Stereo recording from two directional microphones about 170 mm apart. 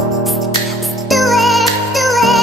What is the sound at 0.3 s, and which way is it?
Music, centre (ahead or behind).